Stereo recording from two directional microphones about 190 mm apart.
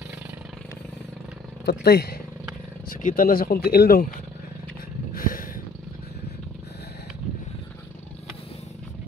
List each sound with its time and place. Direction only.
1.7 s speech: 60° left (ahead or behind)
2.9 s speech: 45° left (ahead or behind)
5.1 s roaring cats: 45° left (ahead or behind)